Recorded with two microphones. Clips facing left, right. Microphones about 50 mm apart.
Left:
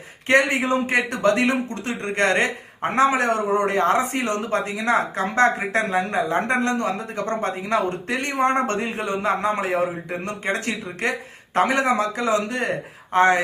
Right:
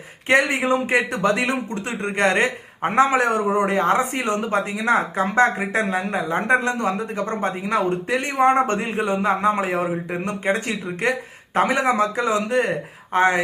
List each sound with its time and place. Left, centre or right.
0.3 s speech: centre
2.9 s a man's voice: right
3.5 s speech: centre
5.9 s a woman's voice: centre
6.5 s speech: centre